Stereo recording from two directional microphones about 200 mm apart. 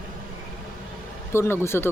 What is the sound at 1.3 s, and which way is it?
Speech, 15° left (ahead or behind).